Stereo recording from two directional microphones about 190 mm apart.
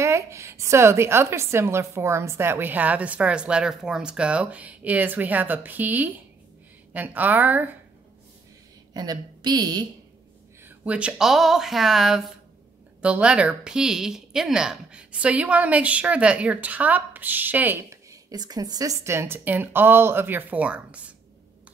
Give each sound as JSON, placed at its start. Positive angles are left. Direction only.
{"t": 0.0, "sound": "a woman's voice", "side_deg": -15}
{"t": 8.9, "sound": "a woman's voice", "side_deg": -20}
{"t": 10.6, "sound": "a woman's voice", "side_deg": -10}